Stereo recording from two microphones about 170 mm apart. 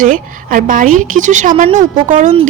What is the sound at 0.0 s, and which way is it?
A woman's voice, 50° right (ahead or behind).